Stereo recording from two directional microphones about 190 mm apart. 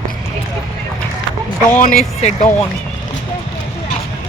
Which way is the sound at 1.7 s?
45° left (ahead or behind).